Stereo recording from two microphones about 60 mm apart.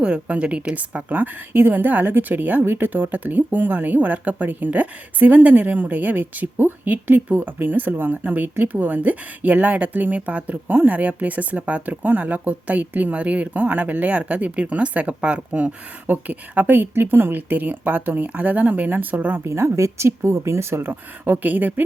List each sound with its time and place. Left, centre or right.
0.0 s a woman's voice: centre
19.5 s speech: right
20.9 s a woman's voice: right